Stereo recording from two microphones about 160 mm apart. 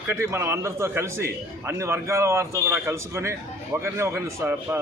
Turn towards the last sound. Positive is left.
turn(degrees=-15)  # may be behind; listen again after turning